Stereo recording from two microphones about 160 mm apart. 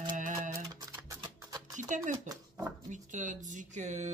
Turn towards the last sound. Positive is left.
turn(degrees=-50)  # may be behind; listen again after turning